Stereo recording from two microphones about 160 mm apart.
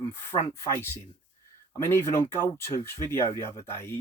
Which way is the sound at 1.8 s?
15° left (ahead or behind).